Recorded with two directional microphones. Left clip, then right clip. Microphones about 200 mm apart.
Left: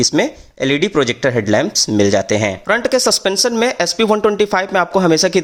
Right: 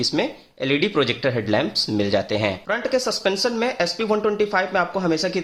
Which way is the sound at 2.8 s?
45° left (ahead or behind).